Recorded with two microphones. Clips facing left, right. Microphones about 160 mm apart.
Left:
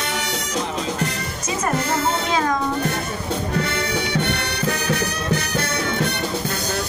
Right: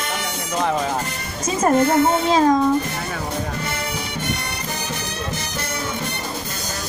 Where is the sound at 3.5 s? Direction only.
70° left (ahead or behind).